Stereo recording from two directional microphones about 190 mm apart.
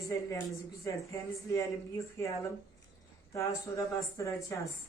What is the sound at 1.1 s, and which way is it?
Speech, 15° left (ahead or behind).